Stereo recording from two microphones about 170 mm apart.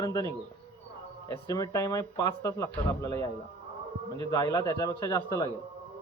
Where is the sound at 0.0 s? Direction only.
20° left (ahead or behind).